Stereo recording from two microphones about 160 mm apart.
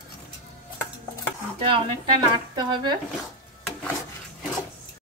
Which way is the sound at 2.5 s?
25° right (ahead or behind).